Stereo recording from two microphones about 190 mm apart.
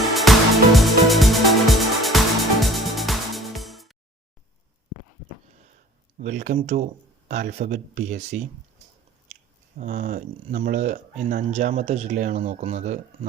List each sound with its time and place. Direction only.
0.1 s music: centre (ahead or behind)
6.1 s speech: 40° right (ahead or behind)
9.7 s speech: 45° right (ahead or behind)